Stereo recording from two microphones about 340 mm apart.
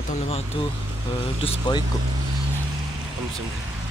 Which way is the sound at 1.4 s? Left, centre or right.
Centre.